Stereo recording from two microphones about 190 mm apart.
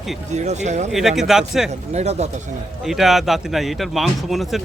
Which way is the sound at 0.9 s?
Centre (ahead or behind).